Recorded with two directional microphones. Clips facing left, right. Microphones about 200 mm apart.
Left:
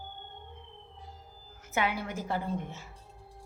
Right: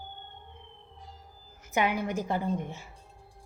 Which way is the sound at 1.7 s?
15° right (ahead or behind).